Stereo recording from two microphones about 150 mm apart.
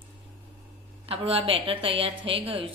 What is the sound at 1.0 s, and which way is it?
A woman's voice, 40° right (ahead or behind).